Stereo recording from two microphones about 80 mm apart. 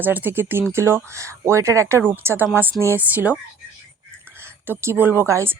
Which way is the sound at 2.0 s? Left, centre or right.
Right.